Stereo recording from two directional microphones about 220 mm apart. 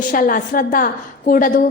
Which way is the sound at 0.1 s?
40° left (ahead or behind).